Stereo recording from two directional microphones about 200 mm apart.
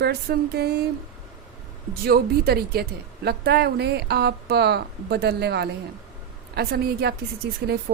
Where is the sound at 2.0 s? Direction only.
50° right (ahead or behind).